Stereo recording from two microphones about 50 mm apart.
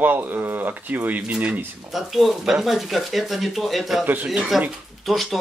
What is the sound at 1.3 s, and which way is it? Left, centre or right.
Speech, right.